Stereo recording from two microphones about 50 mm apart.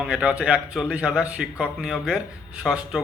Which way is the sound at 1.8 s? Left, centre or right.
Centre.